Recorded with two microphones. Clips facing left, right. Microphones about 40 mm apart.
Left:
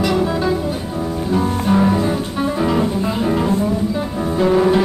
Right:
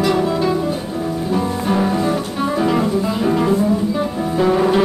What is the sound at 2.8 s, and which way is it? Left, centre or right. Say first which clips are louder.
Music: right 1 dB; centre.